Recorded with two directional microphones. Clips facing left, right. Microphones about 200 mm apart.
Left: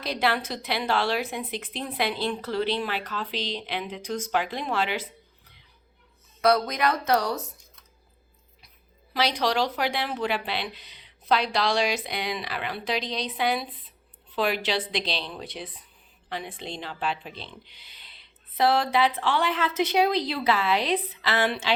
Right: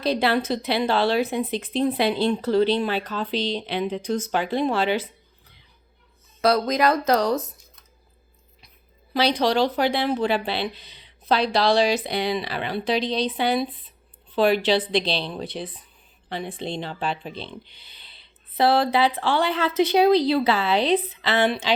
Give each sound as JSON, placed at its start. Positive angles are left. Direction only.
{"t": 0.0, "sound": "speech", "side_deg": -30}
{"t": 9.1, "sound": "speech", "side_deg": -30}